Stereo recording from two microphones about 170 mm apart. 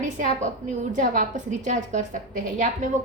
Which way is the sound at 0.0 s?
45° right (ahead or behind).